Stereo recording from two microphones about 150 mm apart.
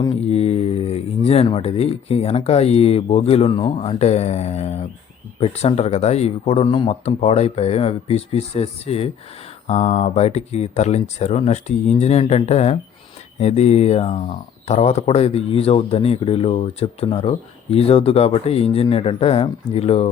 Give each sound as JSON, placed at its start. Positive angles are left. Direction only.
{"t": 0.0, "sound": "speech", "side_deg": 40}
{"t": 3.8, "sound": "speech", "side_deg": 45}